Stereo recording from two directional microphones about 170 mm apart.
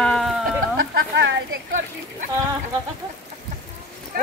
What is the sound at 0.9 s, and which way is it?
Speech, 90° right.